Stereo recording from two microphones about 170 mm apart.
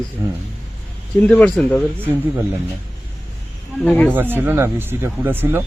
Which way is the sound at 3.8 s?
5° left (ahead or behind).